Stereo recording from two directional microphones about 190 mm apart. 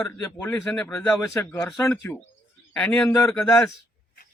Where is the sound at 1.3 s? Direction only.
15° left (ahead or behind).